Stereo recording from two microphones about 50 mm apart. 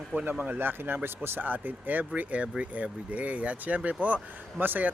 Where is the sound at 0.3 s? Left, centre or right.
Right.